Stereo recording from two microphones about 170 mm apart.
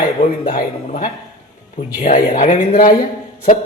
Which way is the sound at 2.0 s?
50° left (ahead or behind).